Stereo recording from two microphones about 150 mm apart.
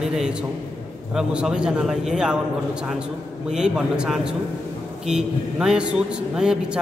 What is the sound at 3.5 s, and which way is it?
A man's voice, 5° right (ahead or behind).